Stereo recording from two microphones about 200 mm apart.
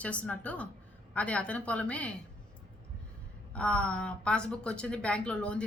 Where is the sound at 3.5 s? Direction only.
5° left (ahead or behind).